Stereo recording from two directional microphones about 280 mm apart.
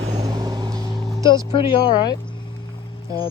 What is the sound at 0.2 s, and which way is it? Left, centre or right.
Vehicle, centre.